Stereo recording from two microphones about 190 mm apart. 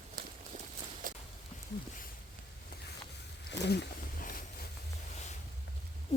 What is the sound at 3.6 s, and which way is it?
Wild animals, 60° left (ahead or behind).